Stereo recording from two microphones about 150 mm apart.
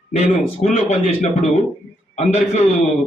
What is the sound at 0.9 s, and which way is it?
A man's voice, 45° left (ahead or behind).